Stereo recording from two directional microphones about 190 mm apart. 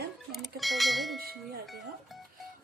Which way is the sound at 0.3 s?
Centre (ahead or behind).